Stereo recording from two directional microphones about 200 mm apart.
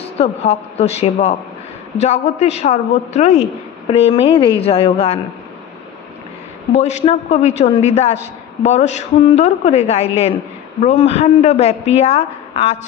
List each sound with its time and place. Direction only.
0.0 s a woman's voice: 30° left (ahead or behind)
6.7 s a woman's voice: 35° left (ahead or behind)